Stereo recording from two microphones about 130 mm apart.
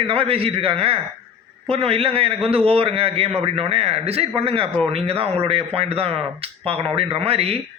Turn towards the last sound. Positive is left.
turn(degrees=-50)  # may be behind; listen again after turning